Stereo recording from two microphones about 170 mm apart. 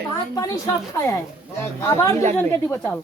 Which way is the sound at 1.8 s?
20° left (ahead or behind).